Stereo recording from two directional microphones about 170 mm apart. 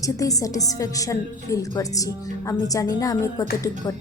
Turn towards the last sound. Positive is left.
turn(degrees=20)  # may be behind; listen again after turning